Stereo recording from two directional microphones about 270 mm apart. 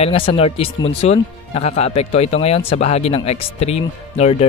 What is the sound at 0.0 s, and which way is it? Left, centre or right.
Speech, centre.